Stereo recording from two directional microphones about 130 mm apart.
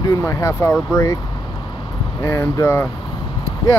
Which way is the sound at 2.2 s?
25° left (ahead or behind).